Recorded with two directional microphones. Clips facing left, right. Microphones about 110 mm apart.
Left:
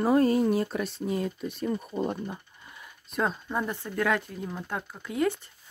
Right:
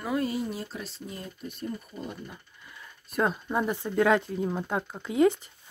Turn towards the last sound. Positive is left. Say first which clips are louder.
# right 5 dB
turn(degrees=-20)  # may be behind; listen again after turning